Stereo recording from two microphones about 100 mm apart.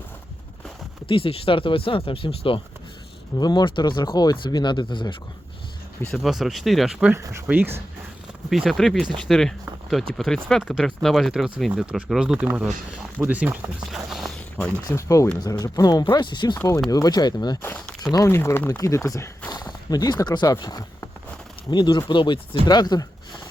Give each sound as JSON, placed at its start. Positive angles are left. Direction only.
{"t": 1.0, "sound": "speech", "side_deg": 60}
{"t": 3.3, "sound": "speech", "side_deg": 45}
{"t": 6.2, "sound": "speech", "side_deg": 0}
{"t": 7.4, "sound": "speech", "side_deg": -20}
{"t": 8.4, "sound": "speech", "side_deg": 0}
{"t": 13.9, "sound": "a sound", "side_deg": 0}
{"t": 14.8, "sound": "speech", "side_deg": 30}
{"t": 16.9, "sound": "speech", "side_deg": 40}
{"t": 17.7, "sound": "a sound", "side_deg": 10}
{"t": 18.3, "sound": "speech", "side_deg": 25}